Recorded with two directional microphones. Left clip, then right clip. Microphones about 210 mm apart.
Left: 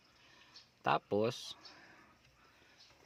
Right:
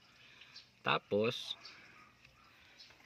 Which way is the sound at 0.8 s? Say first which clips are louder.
Even; 20° left (ahead or behind).